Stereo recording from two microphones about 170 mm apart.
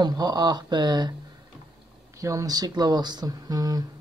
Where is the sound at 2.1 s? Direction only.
20° right (ahead or behind).